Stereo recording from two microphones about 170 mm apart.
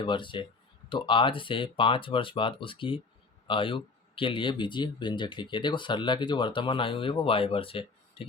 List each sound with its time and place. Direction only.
0.0 s speech: 30° left (ahead or behind)